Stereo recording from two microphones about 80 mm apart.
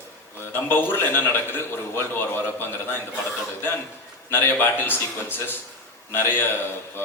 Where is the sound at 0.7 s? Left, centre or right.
Left.